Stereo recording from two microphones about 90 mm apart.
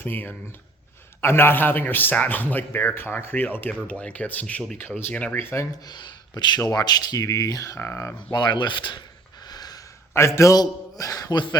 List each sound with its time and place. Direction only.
0.0 s a man's voice: 20° left (ahead or behind)
5.8 s a man's voice: 50° left (ahead or behind)
7.8 s a man's voice: 25° left (ahead or behind)
8.3 s speech: 55° left (ahead or behind)
9.5 s a sound: 45° left (ahead or behind)
10.2 s a man's voice: 30° left (ahead or behind)